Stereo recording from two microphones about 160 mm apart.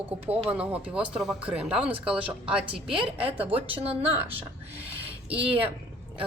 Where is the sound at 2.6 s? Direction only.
35° right (ahead or behind).